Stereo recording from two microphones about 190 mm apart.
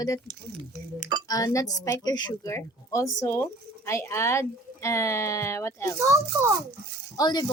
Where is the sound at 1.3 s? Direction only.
20° left (ahead or behind).